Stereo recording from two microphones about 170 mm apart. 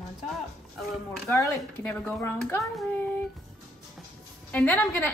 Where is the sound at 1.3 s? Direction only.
15° left (ahead or behind).